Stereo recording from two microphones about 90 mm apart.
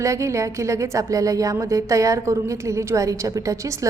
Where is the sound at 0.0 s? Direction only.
35° right (ahead or behind).